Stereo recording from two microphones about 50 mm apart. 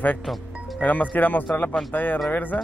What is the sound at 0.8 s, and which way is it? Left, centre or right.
Speech, left.